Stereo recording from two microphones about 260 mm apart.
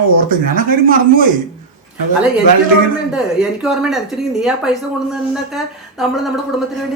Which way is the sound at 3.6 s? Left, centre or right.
Centre.